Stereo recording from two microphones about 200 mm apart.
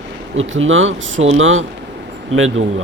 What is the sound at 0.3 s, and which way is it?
Speech, 80° right.